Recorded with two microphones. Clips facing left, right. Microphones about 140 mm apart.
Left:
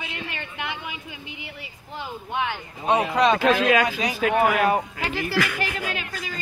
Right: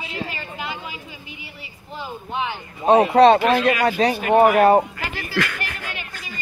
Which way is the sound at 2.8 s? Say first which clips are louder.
Right 7 dB; 40° right (ahead or behind).